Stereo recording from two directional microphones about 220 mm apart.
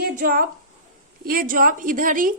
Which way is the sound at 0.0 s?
40° right (ahead or behind).